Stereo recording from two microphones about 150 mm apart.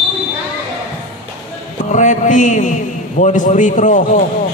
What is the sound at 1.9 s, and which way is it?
A man's voice, 55° left (ahead or behind).